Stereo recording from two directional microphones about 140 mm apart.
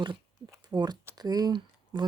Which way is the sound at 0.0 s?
30° right (ahead or behind).